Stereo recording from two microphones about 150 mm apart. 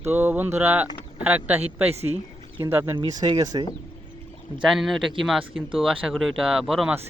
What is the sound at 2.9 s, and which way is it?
Speech, 30° right (ahead or behind).